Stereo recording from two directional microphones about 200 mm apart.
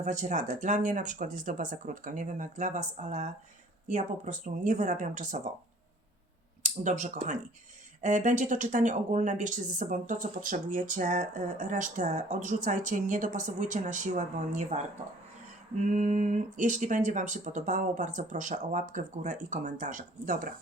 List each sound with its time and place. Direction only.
0.0 s speech: 40° right (ahead or behind)
6.6 s speech: 35° right (ahead or behind)